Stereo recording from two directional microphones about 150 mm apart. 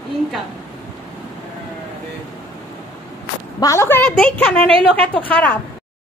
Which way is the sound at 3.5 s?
20° left (ahead or behind).